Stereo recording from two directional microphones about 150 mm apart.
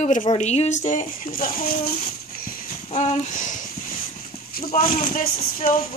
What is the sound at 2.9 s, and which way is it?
Speech, 55° left (ahead or behind).